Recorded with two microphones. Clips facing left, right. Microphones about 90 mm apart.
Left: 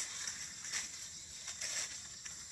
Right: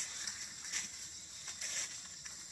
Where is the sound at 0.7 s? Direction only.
5° left (ahead or behind).